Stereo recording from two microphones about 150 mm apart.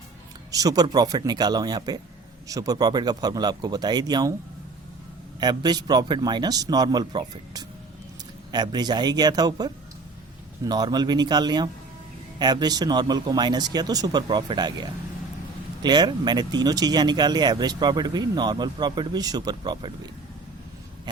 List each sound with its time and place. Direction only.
0.5 s speech: 25° right (ahead or behind)
5.4 s speech: 30° right (ahead or behind)